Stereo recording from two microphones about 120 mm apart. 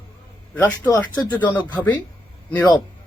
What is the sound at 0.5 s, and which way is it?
Speech, 15° left (ahead or behind).